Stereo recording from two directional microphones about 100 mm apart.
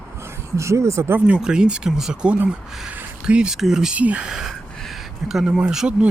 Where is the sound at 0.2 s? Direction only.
30° right (ahead or behind).